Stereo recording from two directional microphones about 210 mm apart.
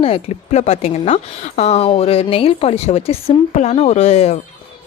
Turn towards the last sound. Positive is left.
turn(degrees=30)  # may be behind; listen again after turning